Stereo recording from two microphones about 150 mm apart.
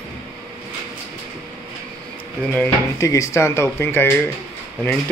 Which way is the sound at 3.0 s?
20° left (ahead or behind).